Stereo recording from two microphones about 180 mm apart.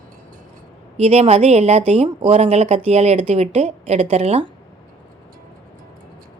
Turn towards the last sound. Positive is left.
turn(degrees=-35)  # may be behind; listen again after turning